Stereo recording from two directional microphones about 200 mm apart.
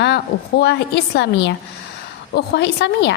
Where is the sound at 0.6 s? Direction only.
55° left (ahead or behind).